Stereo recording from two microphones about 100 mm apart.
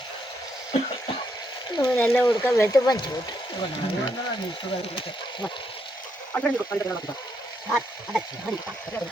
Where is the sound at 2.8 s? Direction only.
40° left (ahead or behind).